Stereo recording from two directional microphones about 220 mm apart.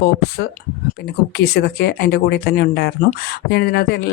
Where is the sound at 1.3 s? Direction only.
50° left (ahead or behind).